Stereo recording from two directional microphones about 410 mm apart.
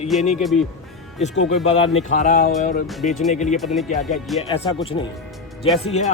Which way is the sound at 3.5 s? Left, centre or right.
Centre.